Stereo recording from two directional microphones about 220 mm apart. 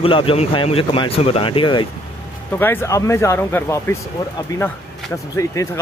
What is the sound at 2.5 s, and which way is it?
Speech, 10° left (ahead or behind).